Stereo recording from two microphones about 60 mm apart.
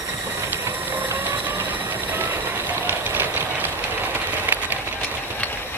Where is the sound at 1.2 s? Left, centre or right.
Right.